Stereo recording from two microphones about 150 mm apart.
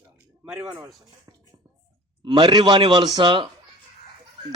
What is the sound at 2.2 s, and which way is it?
A man's voice, 30° right (ahead or behind).